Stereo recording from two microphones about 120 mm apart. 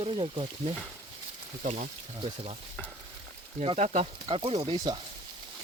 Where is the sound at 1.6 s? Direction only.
90° right.